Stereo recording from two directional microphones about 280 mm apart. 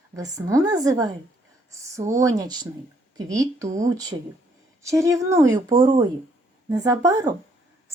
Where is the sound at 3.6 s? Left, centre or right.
Right.